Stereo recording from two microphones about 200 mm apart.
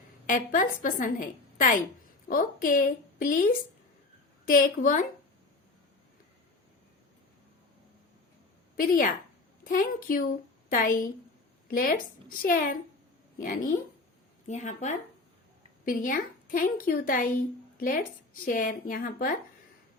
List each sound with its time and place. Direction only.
0.3 s a woman's voice: 40° left (ahead or behind)
2.2 s a woman's voice: 45° left (ahead or behind)
4.4 s a woman's voice: 45° left (ahead or behind)
8.7 s a woman's voice: 45° left (ahead or behind)